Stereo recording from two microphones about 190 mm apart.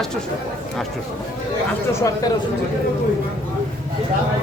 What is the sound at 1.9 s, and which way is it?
Speech, 20° left (ahead or behind).